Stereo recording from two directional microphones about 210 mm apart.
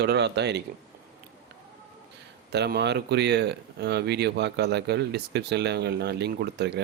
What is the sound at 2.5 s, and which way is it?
Speech, 50° right (ahead or behind).